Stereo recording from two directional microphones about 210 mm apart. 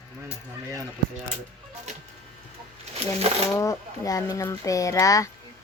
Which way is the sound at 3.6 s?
15° left (ahead or behind).